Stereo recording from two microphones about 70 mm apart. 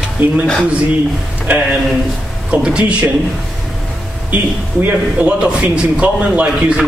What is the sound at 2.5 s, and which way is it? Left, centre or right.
Speech, centre.